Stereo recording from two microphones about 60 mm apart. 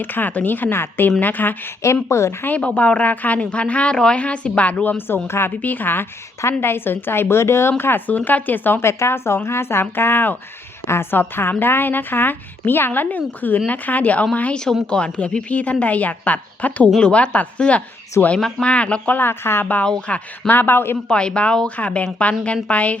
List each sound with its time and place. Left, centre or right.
0.0 s a woman's voice: left
1.8 s speech: left
2.6 s a woman's voice: left
7.8 s a woman's voice: left
18.2 s speech: left
18.6 s a woman's voice: centre
19.1 s a woman's voice: left
19.8 s speech: centre
20.5 s a woman's voice: left
21.1 s a woman's voice: centre